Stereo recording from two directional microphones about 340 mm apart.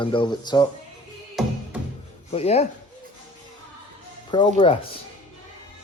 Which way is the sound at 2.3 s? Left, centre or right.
Centre.